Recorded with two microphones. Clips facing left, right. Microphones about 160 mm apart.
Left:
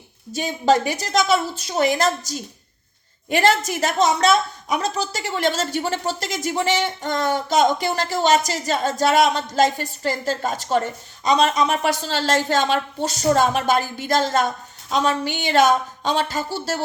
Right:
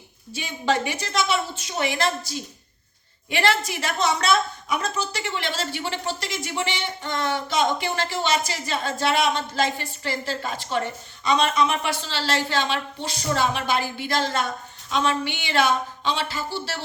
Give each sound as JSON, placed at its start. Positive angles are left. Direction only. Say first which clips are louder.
{"t": 0.3, "sound": "a woman's voice", "louder": "left 6 dB", "side_deg": 40}